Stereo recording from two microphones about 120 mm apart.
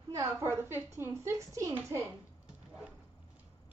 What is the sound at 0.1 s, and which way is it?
A woman's voice, 20° right (ahead or behind).